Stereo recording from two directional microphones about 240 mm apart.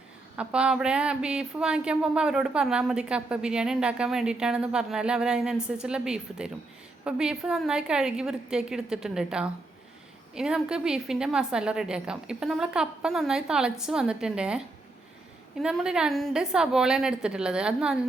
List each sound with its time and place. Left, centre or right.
0.3 s speech: centre